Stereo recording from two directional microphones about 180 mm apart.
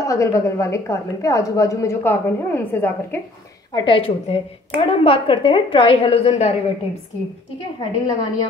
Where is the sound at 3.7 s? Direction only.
30° left (ahead or behind).